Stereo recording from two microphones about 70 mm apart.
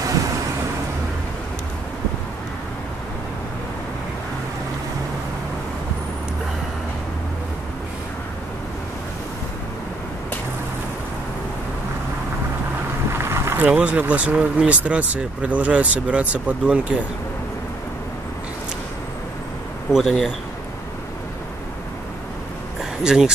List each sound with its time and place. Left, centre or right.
13.2 s boat: right
13.6 s speech: right
19.9 s speech: centre
23.0 s speech: centre